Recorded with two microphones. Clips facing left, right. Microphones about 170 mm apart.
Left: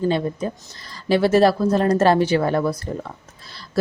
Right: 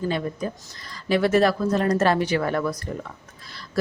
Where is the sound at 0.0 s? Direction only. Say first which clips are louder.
Left 5 dB; 25° left (ahead or behind).